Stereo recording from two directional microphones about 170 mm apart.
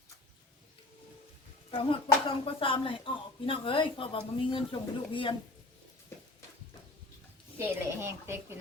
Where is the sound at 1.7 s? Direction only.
30° left (ahead or behind).